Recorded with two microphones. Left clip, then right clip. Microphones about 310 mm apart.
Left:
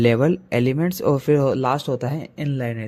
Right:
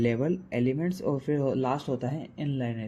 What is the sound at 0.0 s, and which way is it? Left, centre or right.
Speech, left.